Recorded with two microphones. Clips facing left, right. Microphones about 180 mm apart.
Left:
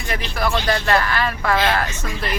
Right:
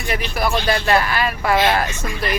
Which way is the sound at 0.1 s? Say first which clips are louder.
Right 1 dB; 10° right (ahead or behind).